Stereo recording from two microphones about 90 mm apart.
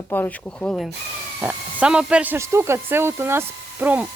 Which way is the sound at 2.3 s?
30° right (ahead or behind).